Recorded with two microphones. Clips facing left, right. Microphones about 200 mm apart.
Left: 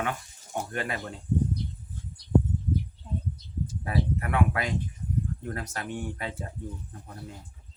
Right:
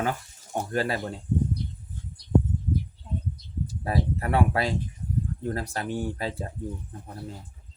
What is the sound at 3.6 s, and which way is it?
Speech, 35° right (ahead or behind).